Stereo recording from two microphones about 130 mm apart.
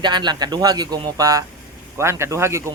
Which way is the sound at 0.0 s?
35° right (ahead or behind).